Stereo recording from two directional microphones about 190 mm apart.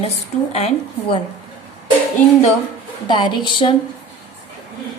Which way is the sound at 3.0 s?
25° left (ahead or behind).